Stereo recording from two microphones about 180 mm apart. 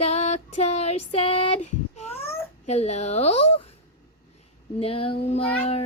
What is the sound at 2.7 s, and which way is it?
Female singing, 35° left (ahead or behind).